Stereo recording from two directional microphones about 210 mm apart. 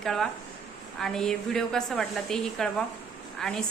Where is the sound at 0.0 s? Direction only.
Centre (ahead or behind).